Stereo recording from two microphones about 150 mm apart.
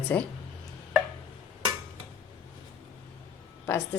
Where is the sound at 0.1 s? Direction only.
10° left (ahead or behind).